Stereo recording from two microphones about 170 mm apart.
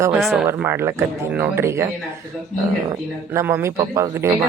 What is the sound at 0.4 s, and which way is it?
Speech, 15° right (ahead or behind).